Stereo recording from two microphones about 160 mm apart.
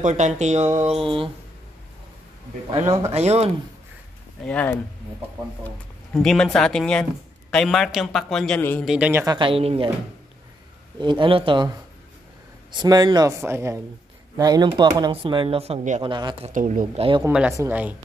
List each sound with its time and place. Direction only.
0.0 s speech: 50° right (ahead or behind)
2.7 s speech: 45° right (ahead or behind)
4.5 s speech: 10° left (ahead or behind)
6.1 s a man's voice: 5° left (ahead or behind)
8.8 s speech: 5° right (ahead or behind)
9.2 s speech: 30° right (ahead or behind)
11.0 s speech: 30° right (ahead or behind)
12.7 s speech: 25° right (ahead or behind); by 16.0 s 45° right (ahead or behind)
16.0 s speech: 30° right (ahead or behind)
16.4 s speech: 55° right (ahead or behind)
17.3 s a man's voice: 5° right (ahead or behind)